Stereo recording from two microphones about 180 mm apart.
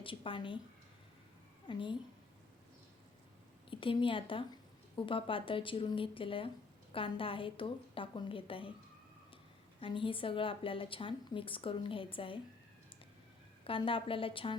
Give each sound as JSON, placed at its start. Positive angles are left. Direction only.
{"t": 0.0, "sound": "a woman's voice", "side_deg": 30}
{"t": 1.6, "sound": "a woman's voice", "side_deg": 25}
{"t": 3.7, "sound": "a woman's voice", "side_deg": 30}
{"t": 9.8, "sound": "a woman's voice", "side_deg": 30}
{"t": 13.7, "sound": "a woman's voice", "side_deg": 30}